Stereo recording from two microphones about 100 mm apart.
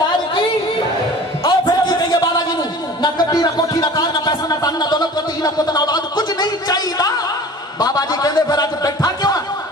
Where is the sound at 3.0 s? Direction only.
40° left (ahead or behind).